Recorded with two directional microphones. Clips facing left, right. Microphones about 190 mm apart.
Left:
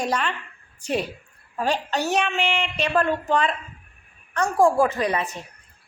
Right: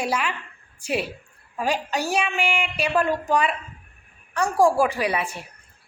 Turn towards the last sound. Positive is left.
turn(degrees=-10)  # may be behind; listen again after turning